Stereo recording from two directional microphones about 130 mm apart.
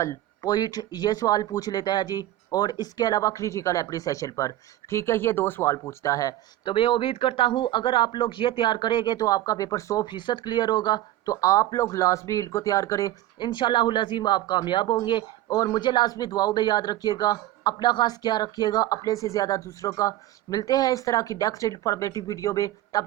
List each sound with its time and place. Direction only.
0.0 s speech: 25° left (ahead or behind)
6.7 s speech: 40° left (ahead or behind)